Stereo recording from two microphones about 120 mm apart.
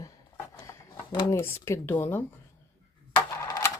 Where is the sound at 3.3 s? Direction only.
25° left (ahead or behind).